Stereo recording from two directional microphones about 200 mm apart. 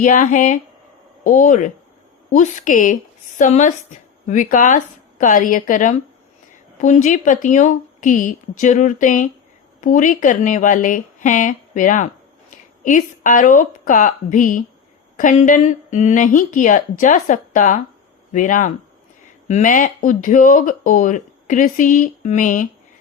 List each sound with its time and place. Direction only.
0.0 s speech: 40° left (ahead or behind)